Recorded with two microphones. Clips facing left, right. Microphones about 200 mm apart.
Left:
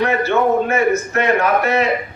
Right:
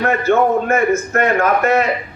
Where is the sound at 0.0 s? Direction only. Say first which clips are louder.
Right 1 dB; 50° right (ahead or behind).